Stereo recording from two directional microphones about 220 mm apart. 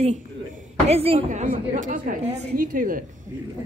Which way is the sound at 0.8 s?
25° right (ahead or behind).